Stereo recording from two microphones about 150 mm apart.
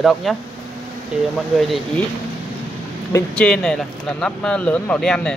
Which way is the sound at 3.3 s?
5° left (ahead or behind).